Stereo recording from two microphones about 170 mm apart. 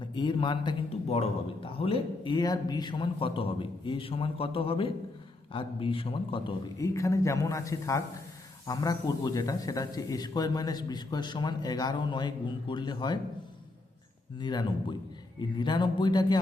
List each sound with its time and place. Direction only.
0.0 s a man's voice: 30° left (ahead or behind)
6.7 s a man's voice: 20° left (ahead or behind)
14.3 s a man's voice: 25° left (ahead or behind)